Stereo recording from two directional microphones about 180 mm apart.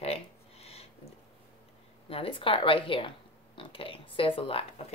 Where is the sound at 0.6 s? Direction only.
35° left (ahead or behind).